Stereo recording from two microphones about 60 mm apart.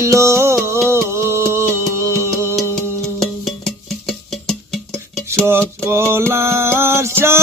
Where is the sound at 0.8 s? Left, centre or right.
Right.